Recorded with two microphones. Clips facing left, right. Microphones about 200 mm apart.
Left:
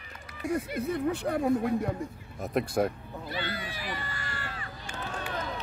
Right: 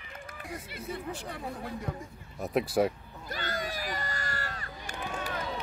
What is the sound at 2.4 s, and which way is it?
Speech, centre (ahead or behind).